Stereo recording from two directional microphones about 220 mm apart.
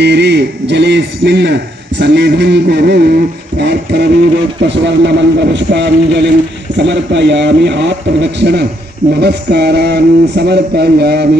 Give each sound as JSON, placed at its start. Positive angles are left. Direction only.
{"t": 0.0, "sound": "a man's voice", "side_deg": -50}